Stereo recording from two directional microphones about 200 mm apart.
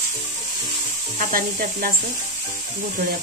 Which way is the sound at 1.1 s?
40° right (ahead or behind).